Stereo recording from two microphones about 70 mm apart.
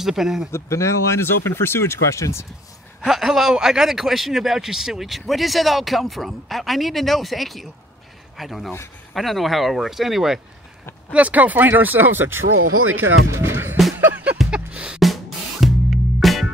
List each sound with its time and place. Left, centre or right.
0.0 s speech: centre
0.5 s speech: left
3.1 s speech: centre
11.1 s speech: right
13.9 s music: right
15.0 s music: centre